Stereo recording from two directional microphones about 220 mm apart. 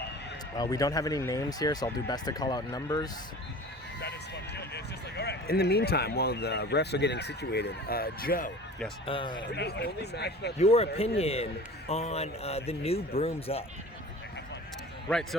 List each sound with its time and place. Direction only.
0.5 s speech: 15° left (ahead or behind)
4.5 s speech: 50° left (ahead or behind)
9.0 s speech: 20° left (ahead or behind)
9.4 s speech: 50° left (ahead or behind)
10.6 s speech: 30° left (ahead or behind)
15.1 s a man's voice: centre (ahead or behind)